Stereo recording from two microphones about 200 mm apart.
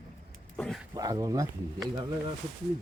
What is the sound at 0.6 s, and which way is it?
Speech, 5° left (ahead or behind).